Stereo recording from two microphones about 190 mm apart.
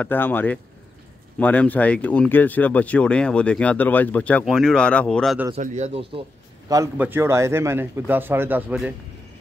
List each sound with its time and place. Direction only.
0.0 s speech: 10° left (ahead or behind)
5.6 s speech: 35° right (ahead or behind)
6.7 s speech: 15° right (ahead or behind)